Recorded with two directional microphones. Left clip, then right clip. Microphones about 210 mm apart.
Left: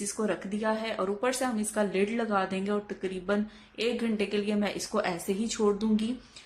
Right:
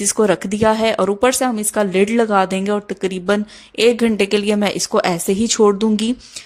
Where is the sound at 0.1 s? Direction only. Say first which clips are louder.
Right 16 dB; 45° right (ahead or behind).